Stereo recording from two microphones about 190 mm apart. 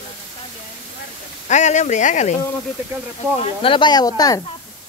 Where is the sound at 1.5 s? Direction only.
40° left (ahead or behind).